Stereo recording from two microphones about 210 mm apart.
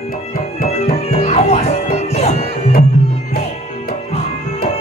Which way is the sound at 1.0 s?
30° left (ahead or behind).